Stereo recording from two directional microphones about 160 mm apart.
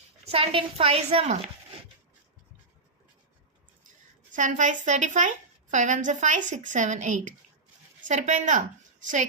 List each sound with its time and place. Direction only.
0.3 s a woman's voice: 35° right (ahead or behind)
4.4 s a woman's voice: 50° right (ahead or behind)